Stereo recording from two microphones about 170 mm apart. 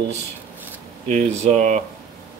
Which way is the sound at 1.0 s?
40° right (ahead or behind).